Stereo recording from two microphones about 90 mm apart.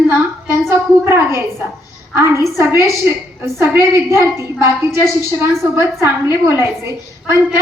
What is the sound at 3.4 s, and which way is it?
A woman's voice, 25° right (ahead or behind).